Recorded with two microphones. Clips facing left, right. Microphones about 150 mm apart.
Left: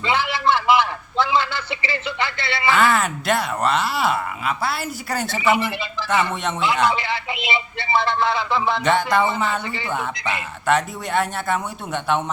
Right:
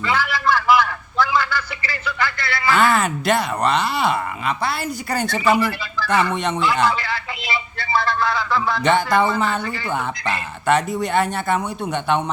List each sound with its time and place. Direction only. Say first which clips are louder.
0.0 s a sound: even; 25° left (ahead or behind)
2.7 s speech: right 2 dB; centre (ahead or behind)
5.4 s speech: right 1 dB; 20° left (ahead or behind)
6.3 s speech: right 3 dB; centre (ahead or behind)
6.8 s a sound: even; 20° left (ahead or behind)
8.8 s speech: right 3 dB; centre (ahead or behind)
10.7 s speech: right 2 dB; centre (ahead or behind)